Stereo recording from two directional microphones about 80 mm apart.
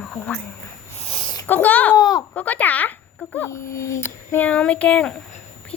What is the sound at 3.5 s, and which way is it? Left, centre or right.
Speech, left.